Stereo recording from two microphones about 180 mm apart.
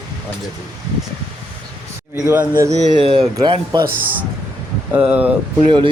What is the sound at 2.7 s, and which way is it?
A man's voice, 35° right (ahead or behind).